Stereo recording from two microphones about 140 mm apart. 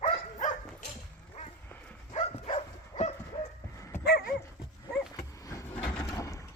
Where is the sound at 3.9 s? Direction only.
90° left.